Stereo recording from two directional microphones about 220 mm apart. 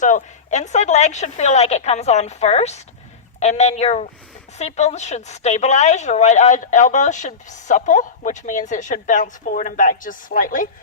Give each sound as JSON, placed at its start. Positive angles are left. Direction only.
{"t": 0.0, "sound": "a woman's voice", "side_deg": 35}